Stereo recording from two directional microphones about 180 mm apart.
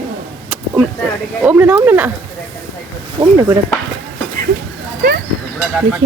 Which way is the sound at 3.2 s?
20° right (ahead or behind).